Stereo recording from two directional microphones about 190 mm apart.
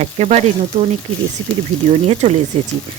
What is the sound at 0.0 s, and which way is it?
Speech, 35° right (ahead or behind).